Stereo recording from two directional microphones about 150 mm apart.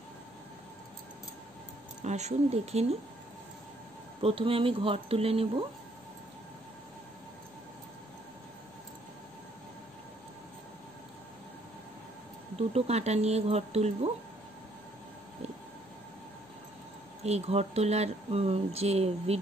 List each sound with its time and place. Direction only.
2.0 s speech: 50° right (ahead or behind)
4.2 s speech: 40° right (ahead or behind)
12.5 s speech: 45° right (ahead or behind)
17.2 s speech: 45° right (ahead or behind)